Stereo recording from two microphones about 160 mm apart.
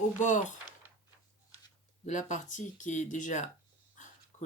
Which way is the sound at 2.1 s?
50° left (ahead or behind).